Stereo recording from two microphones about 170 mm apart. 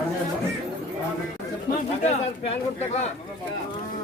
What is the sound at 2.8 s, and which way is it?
Speech, 40° left (ahead or behind).